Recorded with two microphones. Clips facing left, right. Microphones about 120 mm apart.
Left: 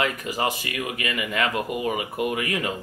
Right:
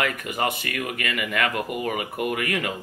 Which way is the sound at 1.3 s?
25° left (ahead or behind).